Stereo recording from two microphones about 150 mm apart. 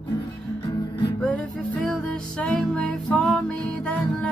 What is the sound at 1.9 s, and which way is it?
Music, 5° left (ahead or behind).